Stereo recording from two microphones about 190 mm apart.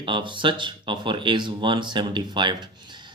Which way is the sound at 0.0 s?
25° right (ahead or behind).